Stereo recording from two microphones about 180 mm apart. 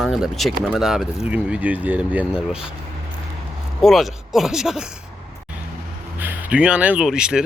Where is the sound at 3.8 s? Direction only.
Centre (ahead or behind).